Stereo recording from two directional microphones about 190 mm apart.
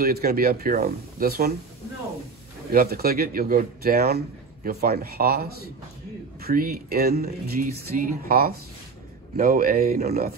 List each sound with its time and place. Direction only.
0.0 s speech: 50° right (ahead or behind)
2.7 s speech: 50° right (ahead or behind)